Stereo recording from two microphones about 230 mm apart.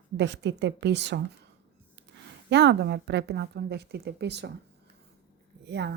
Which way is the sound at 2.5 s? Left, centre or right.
Right.